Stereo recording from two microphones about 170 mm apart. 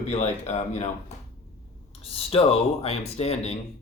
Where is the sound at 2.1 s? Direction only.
35° left (ahead or behind).